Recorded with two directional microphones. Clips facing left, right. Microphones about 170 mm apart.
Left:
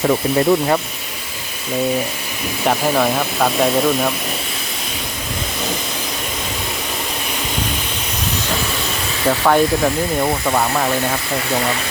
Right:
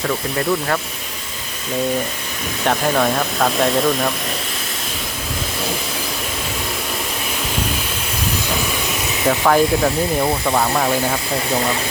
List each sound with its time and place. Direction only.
0.1 s speech: 25° left (ahead or behind)
2.6 s speech: 5° left (ahead or behind)
9.2 s speech: 5° left (ahead or behind)